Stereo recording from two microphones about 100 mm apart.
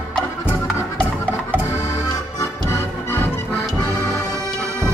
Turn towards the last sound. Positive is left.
turn(degrees=25)  # may be behind; listen again after turning